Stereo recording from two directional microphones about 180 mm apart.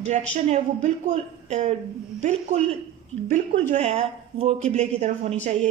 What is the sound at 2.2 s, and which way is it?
A woman's voice, 40° right (ahead or behind).